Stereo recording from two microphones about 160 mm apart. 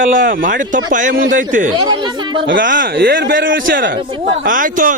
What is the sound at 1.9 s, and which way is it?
Speech, 30° right (ahead or behind).